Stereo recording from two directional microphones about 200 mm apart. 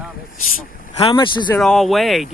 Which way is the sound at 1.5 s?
Centre (ahead or behind).